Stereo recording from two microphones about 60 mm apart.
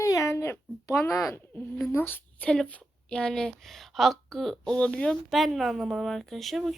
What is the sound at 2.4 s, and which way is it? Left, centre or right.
A woman's voice, centre.